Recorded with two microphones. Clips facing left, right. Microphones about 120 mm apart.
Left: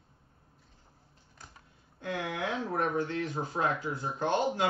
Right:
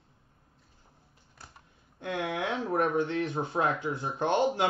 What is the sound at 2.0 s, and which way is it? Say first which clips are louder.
Speech: right 2 dB; 25° right (ahead or behind).